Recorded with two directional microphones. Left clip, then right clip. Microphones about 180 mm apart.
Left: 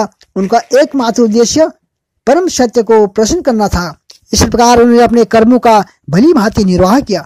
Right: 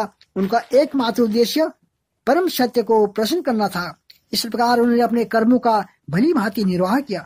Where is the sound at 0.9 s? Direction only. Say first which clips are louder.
Left 8 dB; 40° left (ahead or behind).